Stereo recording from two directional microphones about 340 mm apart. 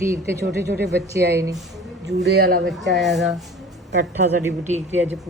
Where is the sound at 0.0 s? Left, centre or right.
Centre.